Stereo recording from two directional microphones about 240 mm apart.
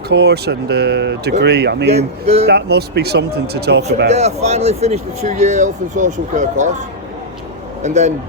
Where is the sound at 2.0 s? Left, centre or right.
Right.